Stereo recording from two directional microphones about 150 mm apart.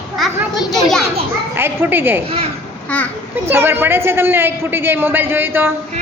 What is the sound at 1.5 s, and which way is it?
Speech, 15° right (ahead or behind).